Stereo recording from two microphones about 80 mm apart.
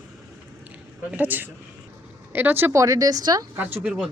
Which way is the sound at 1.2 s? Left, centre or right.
Right.